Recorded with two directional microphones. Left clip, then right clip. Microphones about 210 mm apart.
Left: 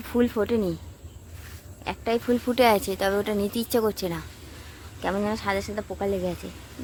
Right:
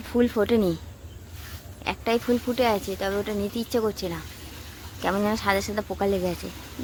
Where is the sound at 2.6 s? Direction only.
25° left (ahead or behind).